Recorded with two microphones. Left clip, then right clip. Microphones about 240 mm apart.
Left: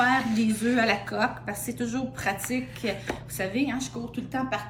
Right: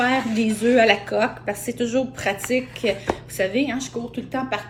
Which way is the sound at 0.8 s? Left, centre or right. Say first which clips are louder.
Right 8 dB; right.